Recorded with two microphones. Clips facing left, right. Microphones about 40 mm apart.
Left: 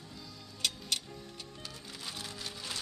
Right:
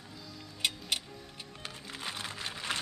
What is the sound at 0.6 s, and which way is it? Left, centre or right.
Music, right.